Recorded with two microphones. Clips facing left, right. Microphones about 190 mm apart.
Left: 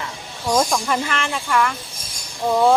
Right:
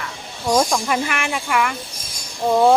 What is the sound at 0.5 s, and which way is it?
Speech, 5° right (ahead or behind).